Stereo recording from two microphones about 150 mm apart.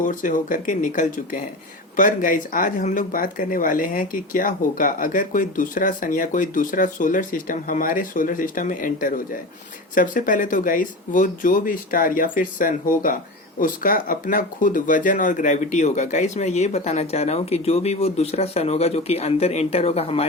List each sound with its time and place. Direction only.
0.0 s speech: 60° left (ahead or behind); by 20.2 s 45° left (ahead or behind)